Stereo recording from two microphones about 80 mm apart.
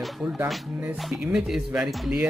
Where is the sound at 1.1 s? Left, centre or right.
Centre.